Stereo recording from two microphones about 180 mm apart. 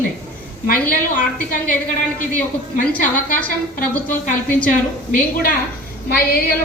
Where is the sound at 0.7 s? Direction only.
55° left (ahead or behind).